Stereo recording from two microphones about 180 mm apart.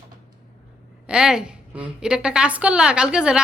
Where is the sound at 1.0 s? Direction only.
5° right (ahead or behind).